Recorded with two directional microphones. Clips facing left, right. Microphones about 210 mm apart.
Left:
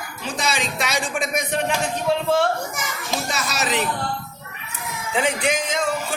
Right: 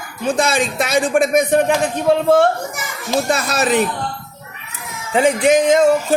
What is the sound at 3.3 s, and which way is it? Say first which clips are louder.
Speech: right 8 dB; 55° right (ahead or behind).